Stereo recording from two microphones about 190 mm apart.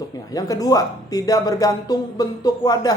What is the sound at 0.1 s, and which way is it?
Speech, 20° left (ahead or behind).